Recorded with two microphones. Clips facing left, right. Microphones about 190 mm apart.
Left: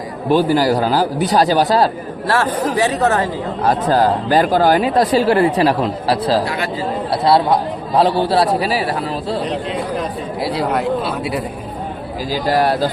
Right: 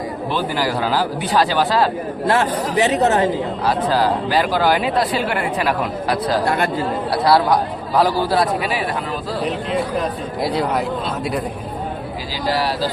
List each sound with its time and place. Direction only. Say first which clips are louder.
0.3 s a man's voice: left 9 dB; 40° left (ahead or behind)
2.2 s speech: left 1 dB; 20° right (ahead or behind)
3.6 s speech: left 5 dB; 45° left (ahead or behind); by 6.4 s 30° left (ahead or behind)
6.4 s speech: right 3 dB; 50° right (ahead or behind)
7.1 s speech: left 1 dB; 25° left (ahead or behind)
10.0 s speech: even; centre (ahead or behind)
12.3 s speech: left 5 dB; 50° left (ahead or behind)